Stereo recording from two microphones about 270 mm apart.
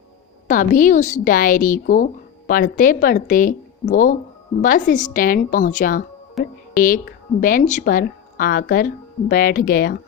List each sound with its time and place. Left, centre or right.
0.4 s speech: left